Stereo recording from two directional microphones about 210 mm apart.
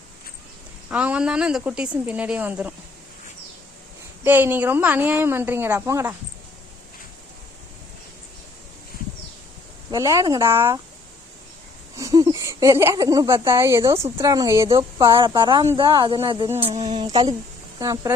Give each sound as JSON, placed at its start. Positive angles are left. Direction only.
{"t": 0.9, "sound": "a woman's voice", "side_deg": -5}
{"t": 4.2, "sound": "a woman's voice", "side_deg": -10}
{"t": 9.9, "sound": "a woman's voice", "side_deg": -15}
{"t": 11.9, "sound": "speech", "side_deg": -15}
{"t": 17.7, "sound": "a woman's voice", "side_deg": -15}